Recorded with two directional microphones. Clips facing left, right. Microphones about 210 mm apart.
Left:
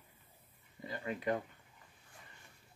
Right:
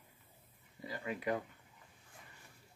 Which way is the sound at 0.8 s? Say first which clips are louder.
Left 1 dB; 5° right (ahead or behind).